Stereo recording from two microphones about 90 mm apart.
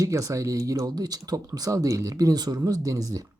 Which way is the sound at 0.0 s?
35° right (ahead or behind).